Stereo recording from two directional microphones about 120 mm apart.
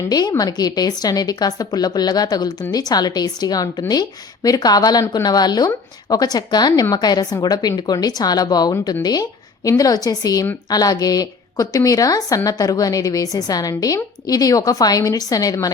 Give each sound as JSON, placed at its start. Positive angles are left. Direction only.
{"t": 0.1, "sound": "a woman's voice", "side_deg": 35}